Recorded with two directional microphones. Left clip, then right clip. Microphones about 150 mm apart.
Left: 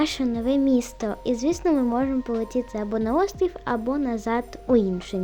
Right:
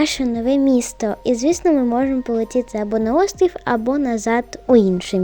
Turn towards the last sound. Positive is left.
turn(degrees=-60)  # may be behind; listen again after turning